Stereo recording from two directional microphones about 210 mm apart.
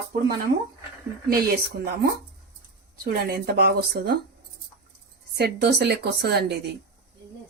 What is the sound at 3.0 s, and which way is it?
Speech, 45° right (ahead or behind).